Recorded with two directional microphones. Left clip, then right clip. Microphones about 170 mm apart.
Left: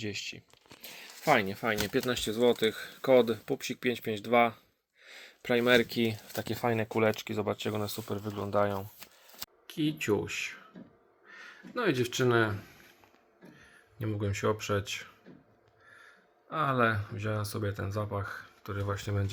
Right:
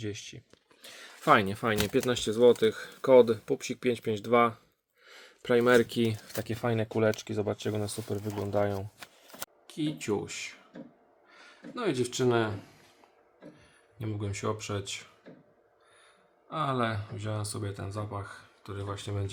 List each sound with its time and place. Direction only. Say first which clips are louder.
0.0 s speech: left 2 dB; 15° left (ahead or behind)
1.2 s speech: right 3 dB; 35° right (ahead or behind)
1.7 s speech: right 3 dB; 15° right (ahead or behind)
6.3 s speech: left 1 dB; 5° right (ahead or behind)
14.0 s speech: left 3 dB; 5° left (ahead or behind)
16.5 s speech: left 3 dB; 10° left (ahead or behind)